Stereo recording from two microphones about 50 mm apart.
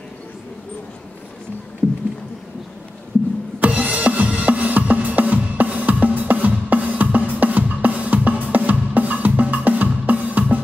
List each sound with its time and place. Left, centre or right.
3.5 s music: right